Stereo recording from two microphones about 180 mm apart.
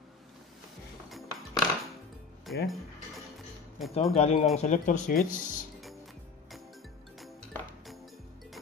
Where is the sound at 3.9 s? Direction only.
35° left (ahead or behind).